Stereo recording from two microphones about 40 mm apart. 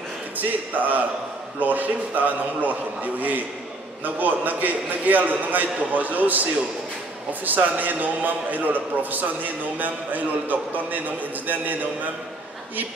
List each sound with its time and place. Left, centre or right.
0.4 s a man's voice: right
7.4 s a man's voice: right